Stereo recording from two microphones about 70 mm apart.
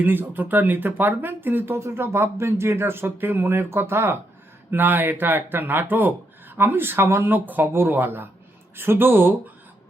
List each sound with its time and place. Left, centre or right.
0.0 s speech: right